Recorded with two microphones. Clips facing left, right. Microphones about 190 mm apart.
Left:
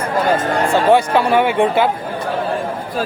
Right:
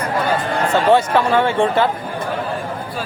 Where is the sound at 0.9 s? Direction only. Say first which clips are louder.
Left 1 dB; 15° left (ahead or behind).